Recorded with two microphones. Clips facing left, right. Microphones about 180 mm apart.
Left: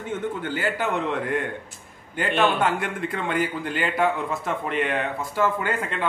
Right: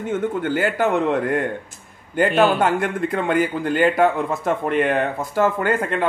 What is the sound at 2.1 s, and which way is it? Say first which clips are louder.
Speech: right 5 dB; 45° right (ahead or behind).